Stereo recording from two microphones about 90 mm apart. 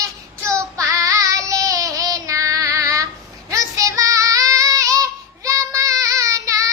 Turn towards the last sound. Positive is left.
turn(degrees=-40)  # may be behind; listen again after turning